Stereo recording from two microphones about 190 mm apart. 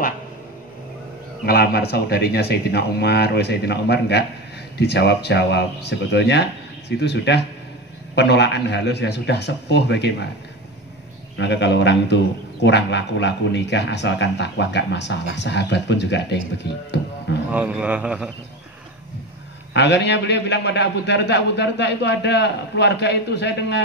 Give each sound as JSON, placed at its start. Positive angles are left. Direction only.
{"t": 1.4, "sound": "a man's voice", "side_deg": 55}
{"t": 11.3, "sound": "a man's voice", "side_deg": 65}
{"t": 17.5, "sound": "a man's voice", "side_deg": -10}
{"t": 19.7, "sound": "a man's voice", "side_deg": 65}